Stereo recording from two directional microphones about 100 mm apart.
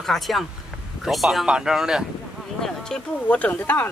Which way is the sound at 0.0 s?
Centre (ahead or behind).